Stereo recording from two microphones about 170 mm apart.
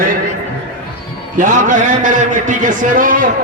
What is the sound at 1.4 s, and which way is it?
A man's voice, 50° right (ahead or behind).